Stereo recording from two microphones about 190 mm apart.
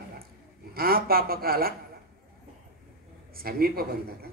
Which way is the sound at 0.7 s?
50° right (ahead or behind).